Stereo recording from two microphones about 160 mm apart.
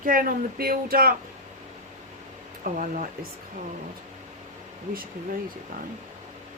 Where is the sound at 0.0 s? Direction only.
60° right (ahead or behind).